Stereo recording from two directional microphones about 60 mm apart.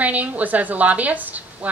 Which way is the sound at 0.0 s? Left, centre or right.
Right.